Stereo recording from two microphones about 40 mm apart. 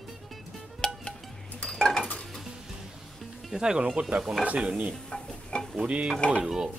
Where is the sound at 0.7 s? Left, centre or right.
Left.